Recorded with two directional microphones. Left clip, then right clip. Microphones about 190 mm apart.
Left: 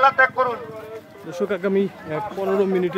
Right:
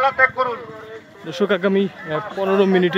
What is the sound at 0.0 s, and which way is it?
Speech, 35° left (ahead or behind).